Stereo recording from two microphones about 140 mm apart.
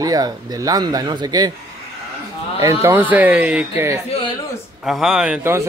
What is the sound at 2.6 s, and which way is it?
Speech, 20° right (ahead or behind).